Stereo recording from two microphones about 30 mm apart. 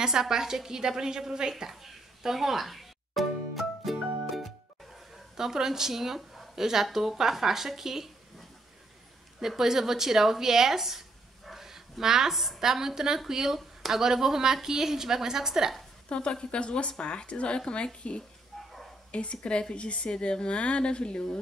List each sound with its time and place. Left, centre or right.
0.0 s a woman's voice: centre
1.7 s a woman's voice: centre
2.7 s music: centre
5.3 s a woman's voice: centre
9.6 s a woman's voice: centre
11.5 s a sound: centre
12.5 s a woman's voice: centre
16.1 s a woman's voice: left